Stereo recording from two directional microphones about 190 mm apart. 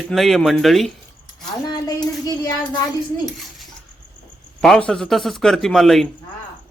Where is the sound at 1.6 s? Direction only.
20° left (ahead or behind).